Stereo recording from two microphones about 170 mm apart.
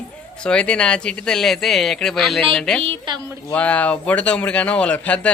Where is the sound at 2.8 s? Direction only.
30° right (ahead or behind).